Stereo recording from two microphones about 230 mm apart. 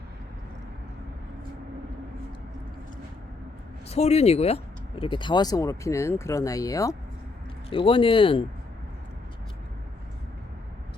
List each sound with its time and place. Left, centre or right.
3.8 s speech: left